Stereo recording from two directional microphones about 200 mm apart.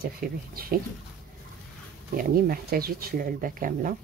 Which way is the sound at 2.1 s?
45° right (ahead or behind).